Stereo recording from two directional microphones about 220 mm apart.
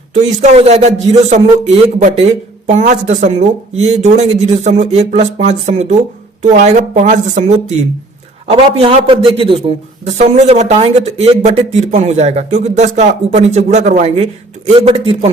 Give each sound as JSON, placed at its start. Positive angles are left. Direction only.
{"t": 0.1, "sound": "a man's voice", "side_deg": -30}